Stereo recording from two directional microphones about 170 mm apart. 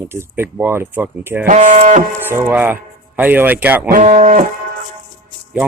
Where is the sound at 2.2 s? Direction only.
10° right (ahead or behind).